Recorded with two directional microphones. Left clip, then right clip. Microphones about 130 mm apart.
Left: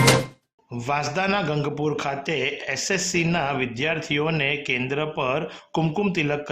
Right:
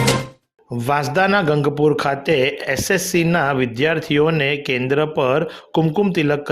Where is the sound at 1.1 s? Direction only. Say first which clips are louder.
Right 8 dB; 40° right (ahead or behind).